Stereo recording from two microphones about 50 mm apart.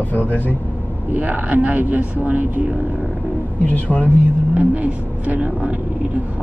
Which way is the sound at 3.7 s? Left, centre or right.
Left.